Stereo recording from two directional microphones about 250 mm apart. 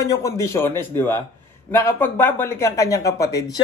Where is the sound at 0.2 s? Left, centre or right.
Centre.